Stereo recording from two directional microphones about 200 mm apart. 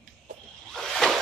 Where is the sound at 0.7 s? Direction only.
Centre (ahead or behind).